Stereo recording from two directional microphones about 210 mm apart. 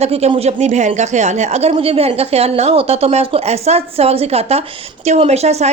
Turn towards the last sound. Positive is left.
turn(degrees=-30)  # may be behind; listen again after turning